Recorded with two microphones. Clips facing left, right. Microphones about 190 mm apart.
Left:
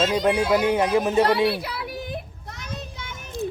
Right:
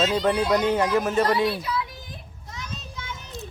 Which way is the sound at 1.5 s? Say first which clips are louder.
Left 1 dB; 70° left (ahead or behind).